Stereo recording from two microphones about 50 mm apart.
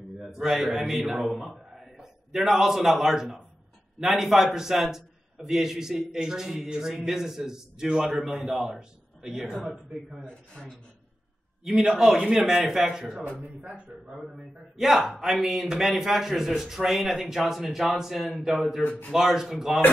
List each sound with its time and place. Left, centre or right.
0.2 s a man's voice: centre
10.2 s a man's voice: left
11.6 s a man's voice: centre
14.2 s a man's voice: centre